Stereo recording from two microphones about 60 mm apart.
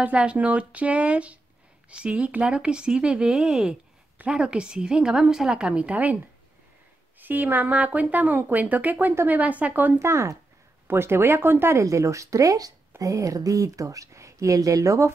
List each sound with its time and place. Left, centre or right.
0.0 s speech: right
7.2 s speech: right
9.9 s speech: right
11.8 s speech: right
13.0 s speech: right